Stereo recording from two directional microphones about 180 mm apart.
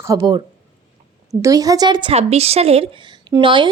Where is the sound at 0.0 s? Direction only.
20° right (ahead or behind).